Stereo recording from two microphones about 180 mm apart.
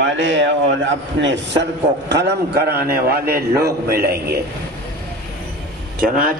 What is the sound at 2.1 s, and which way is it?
Speech, 70° right (ahead or behind).